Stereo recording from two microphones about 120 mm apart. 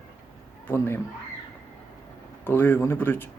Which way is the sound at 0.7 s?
20° left (ahead or behind).